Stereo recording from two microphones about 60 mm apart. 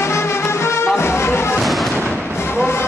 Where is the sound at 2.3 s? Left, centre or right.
Left.